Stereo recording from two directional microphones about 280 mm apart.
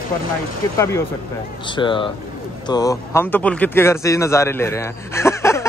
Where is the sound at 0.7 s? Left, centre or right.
Centre.